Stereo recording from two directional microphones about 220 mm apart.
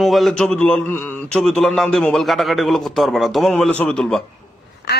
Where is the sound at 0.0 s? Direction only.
Centre (ahead or behind).